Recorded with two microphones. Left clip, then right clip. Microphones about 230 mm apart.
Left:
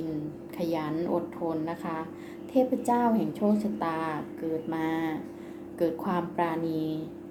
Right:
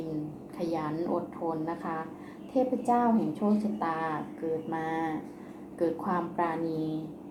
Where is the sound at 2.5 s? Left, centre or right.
Left.